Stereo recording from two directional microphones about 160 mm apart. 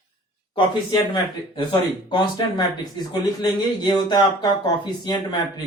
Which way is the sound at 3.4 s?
25° left (ahead or behind).